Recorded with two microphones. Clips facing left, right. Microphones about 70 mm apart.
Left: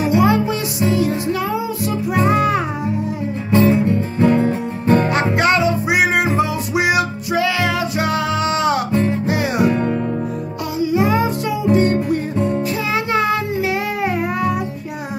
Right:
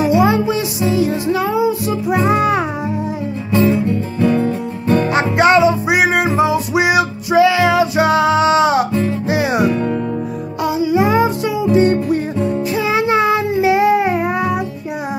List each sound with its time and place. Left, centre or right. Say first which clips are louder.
0.1 s music: right 2 dB; centre
4.3 s music: even; left
5.1 s music: right 4 dB; centre
10.6 s music: right 3 dB; centre
12.7 s child singing: right 4 dB; centre